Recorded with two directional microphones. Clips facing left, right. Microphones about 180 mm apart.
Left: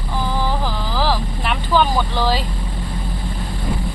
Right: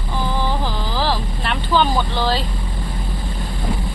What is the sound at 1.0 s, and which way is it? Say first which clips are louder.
Vehicle: left 2 dB; 10° left (ahead or behind).